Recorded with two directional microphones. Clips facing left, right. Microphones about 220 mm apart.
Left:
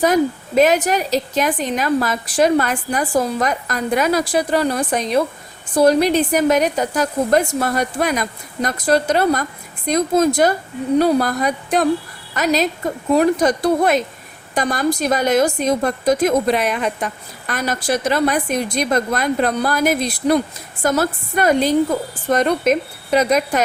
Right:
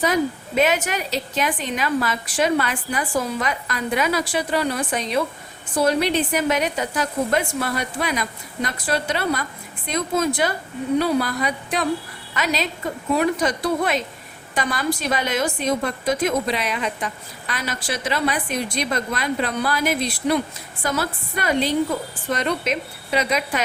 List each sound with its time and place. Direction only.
0.0 s a woman's voice: 45° left (ahead or behind)